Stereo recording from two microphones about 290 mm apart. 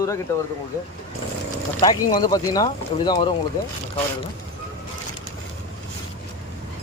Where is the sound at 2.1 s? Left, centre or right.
Centre.